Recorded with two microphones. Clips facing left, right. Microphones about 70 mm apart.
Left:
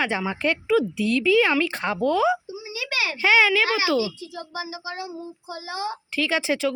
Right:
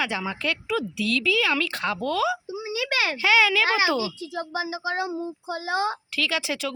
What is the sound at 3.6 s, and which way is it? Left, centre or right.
Speech, right.